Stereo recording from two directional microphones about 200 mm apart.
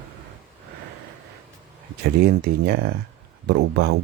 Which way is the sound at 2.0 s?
55° right (ahead or behind).